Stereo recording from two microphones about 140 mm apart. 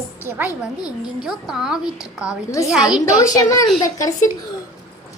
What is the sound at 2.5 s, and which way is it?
A child's voice, 25° left (ahead or behind).